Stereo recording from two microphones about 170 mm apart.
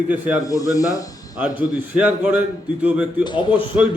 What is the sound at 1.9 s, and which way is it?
A man's voice, 5° right (ahead or behind).